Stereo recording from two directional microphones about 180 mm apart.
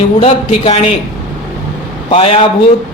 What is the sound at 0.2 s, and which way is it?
Speech, 35° left (ahead or behind).